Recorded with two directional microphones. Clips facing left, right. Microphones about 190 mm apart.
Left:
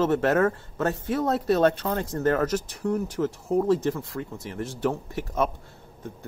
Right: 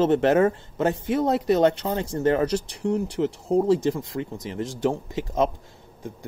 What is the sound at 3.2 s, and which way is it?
Speech, 15° right (ahead or behind).